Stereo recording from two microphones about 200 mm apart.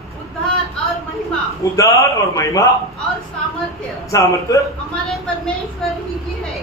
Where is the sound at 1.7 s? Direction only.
15° left (ahead or behind).